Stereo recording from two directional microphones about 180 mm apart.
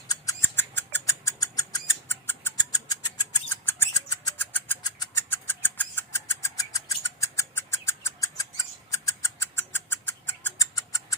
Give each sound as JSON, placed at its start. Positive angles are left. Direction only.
{"t": 0.1, "sound": "rodents", "side_deg": 15}
{"t": 4.8, "sound": "a sound", "side_deg": 20}
{"t": 8.9, "sound": "rodents", "side_deg": 15}